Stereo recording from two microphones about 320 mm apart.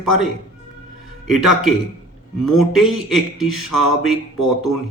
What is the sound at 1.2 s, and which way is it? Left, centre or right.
Speech, centre.